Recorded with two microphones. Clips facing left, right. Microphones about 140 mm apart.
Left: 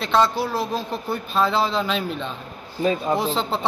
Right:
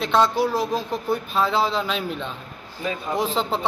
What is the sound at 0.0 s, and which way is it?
Speech, 10° right (ahead or behind).